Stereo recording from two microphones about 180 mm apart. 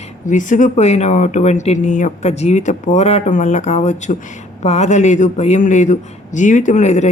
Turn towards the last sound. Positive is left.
turn(degrees=40)  # may be behind; listen again after turning